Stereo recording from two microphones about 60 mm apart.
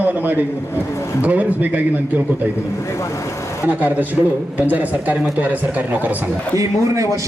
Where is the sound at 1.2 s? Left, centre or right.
Right.